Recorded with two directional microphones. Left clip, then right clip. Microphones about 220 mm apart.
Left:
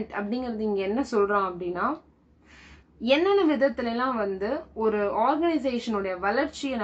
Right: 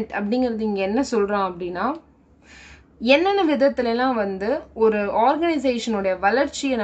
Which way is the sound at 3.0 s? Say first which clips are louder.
Right 4 dB; 50° right (ahead or behind).